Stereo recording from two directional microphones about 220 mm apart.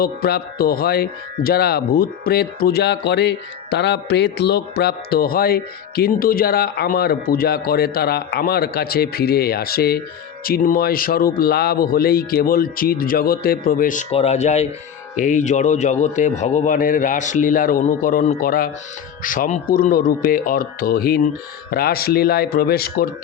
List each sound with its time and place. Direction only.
0.0 s a man's voice: 45° left (ahead or behind)